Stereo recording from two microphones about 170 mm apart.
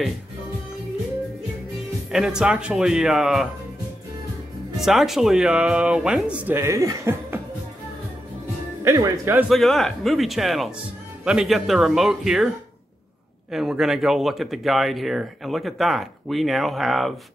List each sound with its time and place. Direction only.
2.0 s speech: centre (ahead or behind)
4.7 s speech: centre (ahead or behind)
8.8 s speech: 20° right (ahead or behind)
9.5 s speech: centre (ahead or behind)